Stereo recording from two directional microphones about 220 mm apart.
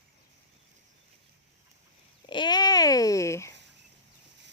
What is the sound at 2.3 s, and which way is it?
Speech, 20° left (ahead or behind).